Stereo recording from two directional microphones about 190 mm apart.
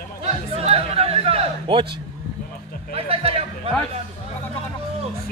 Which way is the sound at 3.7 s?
30° right (ahead or behind).